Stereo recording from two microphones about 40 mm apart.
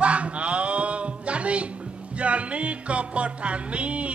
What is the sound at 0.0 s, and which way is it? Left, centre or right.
Music, right.